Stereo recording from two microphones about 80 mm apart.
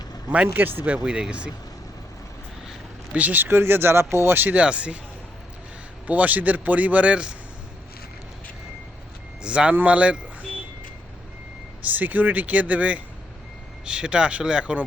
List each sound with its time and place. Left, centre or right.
0.4 s speech: right
3.2 s speech: right
6.1 s speech: centre
9.4 s speech: centre
11.8 s speech: right